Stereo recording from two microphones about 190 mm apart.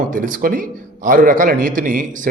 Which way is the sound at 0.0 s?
45° right (ahead or behind).